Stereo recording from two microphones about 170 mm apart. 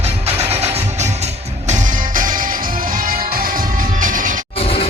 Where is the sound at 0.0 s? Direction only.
40° right (ahead or behind).